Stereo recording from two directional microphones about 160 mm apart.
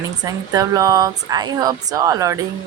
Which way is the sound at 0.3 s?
20° right (ahead or behind).